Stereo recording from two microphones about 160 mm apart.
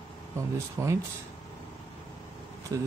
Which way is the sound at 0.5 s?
20° right (ahead or behind).